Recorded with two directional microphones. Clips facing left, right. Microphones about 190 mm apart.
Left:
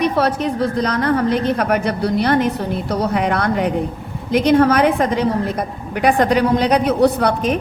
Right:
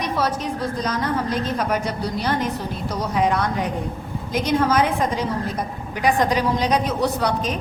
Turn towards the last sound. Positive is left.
turn(degrees=60)  # may be behind; listen again after turning